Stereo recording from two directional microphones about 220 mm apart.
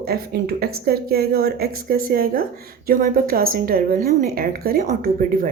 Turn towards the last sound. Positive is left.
turn(degrees=-40)  # may be behind; listen again after turning